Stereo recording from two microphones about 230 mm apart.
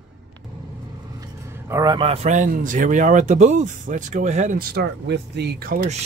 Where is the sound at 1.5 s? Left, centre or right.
Centre.